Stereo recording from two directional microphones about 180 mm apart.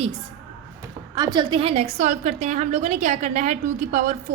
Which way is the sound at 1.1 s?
20° right (ahead or behind).